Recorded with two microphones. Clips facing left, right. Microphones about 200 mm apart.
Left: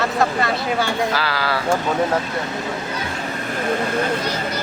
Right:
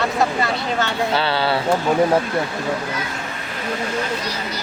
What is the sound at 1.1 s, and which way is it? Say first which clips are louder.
Speech: right 3 dB; 25° right (ahead or behind).